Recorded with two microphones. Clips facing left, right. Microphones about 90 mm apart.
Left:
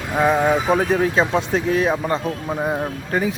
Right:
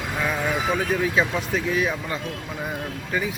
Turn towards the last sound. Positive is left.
turn(degrees=40)  # may be behind; listen again after turning